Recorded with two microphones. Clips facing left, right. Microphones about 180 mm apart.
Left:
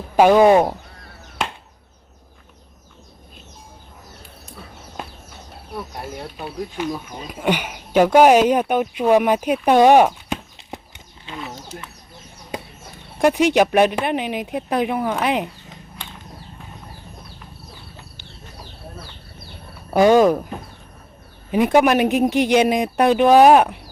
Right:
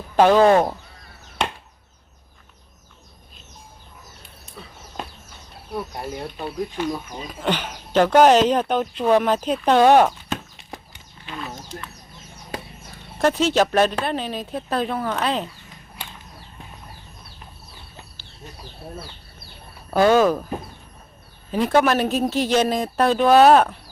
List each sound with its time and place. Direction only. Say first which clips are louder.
0.2 s speech: left 2 dB; 15° left (ahead or behind)
5.7 s speech: right 2 dB; centre (ahead or behind)
13.1 s speech: left 3 dB; 10° left (ahead or behind)
16.0 s a sound: right 1 dB; 10° right (ahead or behind)
19.9 s speech: left 3 dB; 15° left (ahead or behind)
21.5 s speech: left 3 dB; 15° left (ahead or behind)